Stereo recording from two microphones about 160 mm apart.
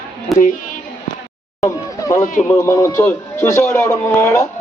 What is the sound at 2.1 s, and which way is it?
Speech, 50° left (ahead or behind).